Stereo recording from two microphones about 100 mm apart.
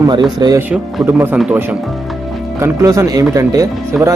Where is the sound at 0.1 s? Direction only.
45° right (ahead or behind).